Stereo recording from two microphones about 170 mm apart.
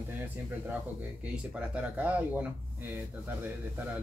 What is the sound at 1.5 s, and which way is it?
Speech, 5° right (ahead or behind).